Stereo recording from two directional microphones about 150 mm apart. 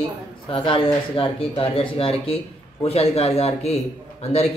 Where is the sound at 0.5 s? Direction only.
35° left (ahead or behind).